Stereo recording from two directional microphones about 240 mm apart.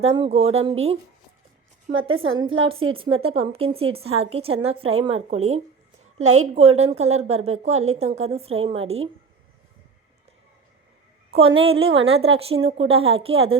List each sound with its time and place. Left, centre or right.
0.0 s speech: right
1.9 s a woman's voice: right
2.6 s speech: right
6.2 s a woman's voice: right
6.5 s speech: right
11.3 s speech: right